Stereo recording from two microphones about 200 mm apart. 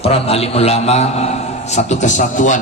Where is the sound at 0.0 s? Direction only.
30° left (ahead or behind).